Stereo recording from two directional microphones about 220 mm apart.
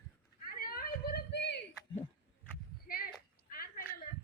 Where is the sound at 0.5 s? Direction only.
45° left (ahead or behind).